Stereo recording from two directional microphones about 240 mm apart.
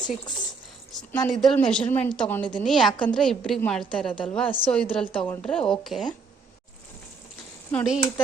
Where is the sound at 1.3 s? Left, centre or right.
Centre.